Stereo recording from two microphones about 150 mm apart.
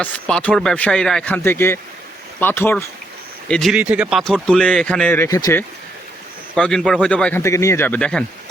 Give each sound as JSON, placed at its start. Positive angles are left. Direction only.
{"t": 0.0, "sound": "speech", "side_deg": 5}
{"t": 3.5, "sound": "a man's voice", "side_deg": 0}
{"t": 3.8, "sound": "speech", "side_deg": -10}
{"t": 4.4, "sound": "speech", "side_deg": 5}
{"t": 6.6, "sound": "a man's voice", "side_deg": 5}
{"t": 7.4, "sound": "speech", "side_deg": 20}